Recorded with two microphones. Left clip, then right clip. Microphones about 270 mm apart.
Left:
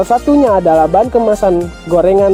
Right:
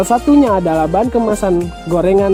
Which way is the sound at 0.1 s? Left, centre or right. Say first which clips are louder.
Left 1 dB; right.